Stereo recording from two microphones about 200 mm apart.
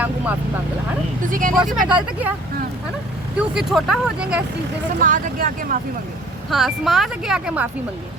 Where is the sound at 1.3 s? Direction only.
45° right (ahead or behind).